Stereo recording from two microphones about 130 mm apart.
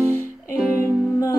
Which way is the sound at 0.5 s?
10° right (ahead or behind).